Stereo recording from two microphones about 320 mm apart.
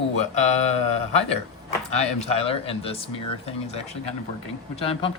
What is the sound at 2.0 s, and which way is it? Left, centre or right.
Speech, centre.